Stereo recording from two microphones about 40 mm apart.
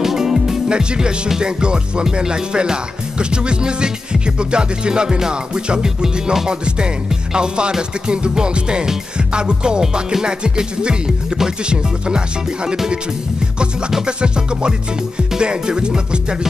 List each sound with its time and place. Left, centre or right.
0.0 s music: centre
0.7 s music: right
14.0 s music: right